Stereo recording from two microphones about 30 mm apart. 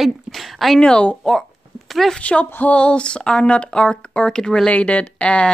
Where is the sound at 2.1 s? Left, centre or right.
Left.